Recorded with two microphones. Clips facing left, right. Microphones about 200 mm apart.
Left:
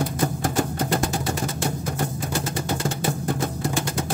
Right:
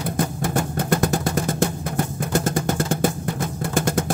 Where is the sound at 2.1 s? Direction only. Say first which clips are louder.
Right 5 dB; 50° right (ahead or behind).